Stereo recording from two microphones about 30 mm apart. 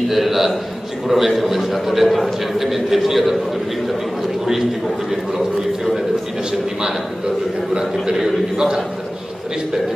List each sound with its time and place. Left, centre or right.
0.1 s a sound: centre
1.0 s a man's voice: centre
7.7 s a man's voice: right